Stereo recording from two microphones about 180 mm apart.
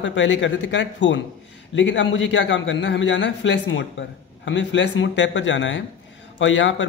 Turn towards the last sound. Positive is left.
turn(degrees=90)